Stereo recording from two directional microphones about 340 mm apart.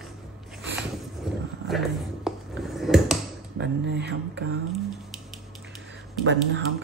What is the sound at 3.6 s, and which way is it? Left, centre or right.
Speech, right.